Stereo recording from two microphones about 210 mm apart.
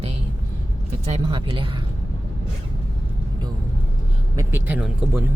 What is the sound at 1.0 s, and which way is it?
Speech, 30° right (ahead or behind).